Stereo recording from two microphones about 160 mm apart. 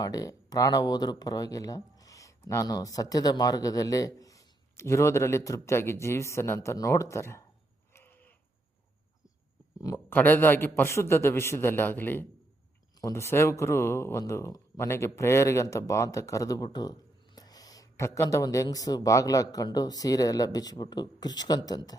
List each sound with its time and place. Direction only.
0.0 s speech: 20° left (ahead or behind)
7.9 s a sound: 10° left (ahead or behind)
9.8 s speech: 15° left (ahead or behind)